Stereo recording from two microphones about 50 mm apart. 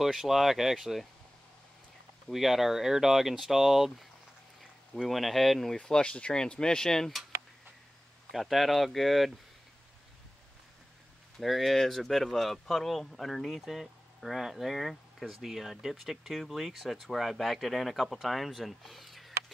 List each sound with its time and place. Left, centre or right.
0.0 s speech: centre
2.2 s speech: centre
5.8 s speech: centre
8.3 s speech: centre
11.3 s speech: centre